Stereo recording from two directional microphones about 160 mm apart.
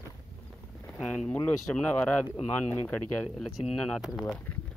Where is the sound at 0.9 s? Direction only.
Centre (ahead or behind).